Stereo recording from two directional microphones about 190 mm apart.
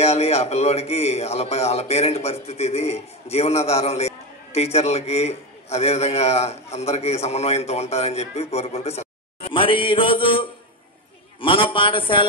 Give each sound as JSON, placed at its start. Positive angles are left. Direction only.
{"t": 0.0, "sound": "a man's voice", "side_deg": 35}